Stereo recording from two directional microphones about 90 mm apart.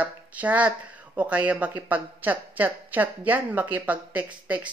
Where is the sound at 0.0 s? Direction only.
15° right (ahead or behind).